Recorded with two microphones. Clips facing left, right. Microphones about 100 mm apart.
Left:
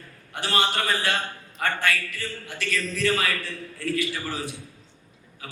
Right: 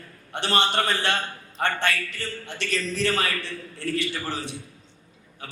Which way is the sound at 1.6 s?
40° right (ahead or behind).